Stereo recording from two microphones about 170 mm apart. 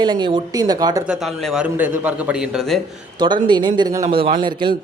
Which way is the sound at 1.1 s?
Centre (ahead or behind).